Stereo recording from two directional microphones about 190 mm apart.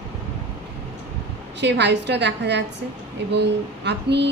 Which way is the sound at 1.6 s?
65° right (ahead or behind).